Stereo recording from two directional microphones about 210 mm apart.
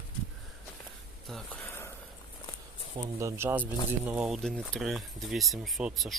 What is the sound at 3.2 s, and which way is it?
Speech, 15° right (ahead or behind).